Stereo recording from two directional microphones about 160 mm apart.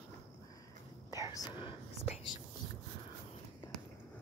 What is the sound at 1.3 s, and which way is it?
Speech, 25° left (ahead or behind).